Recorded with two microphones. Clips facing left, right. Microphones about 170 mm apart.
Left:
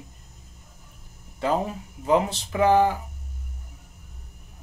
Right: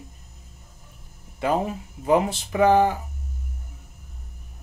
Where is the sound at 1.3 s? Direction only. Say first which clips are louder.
Right 1 dB; 15° right (ahead or behind).